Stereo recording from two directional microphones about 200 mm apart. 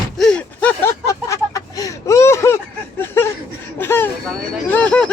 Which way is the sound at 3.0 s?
10° left (ahead or behind).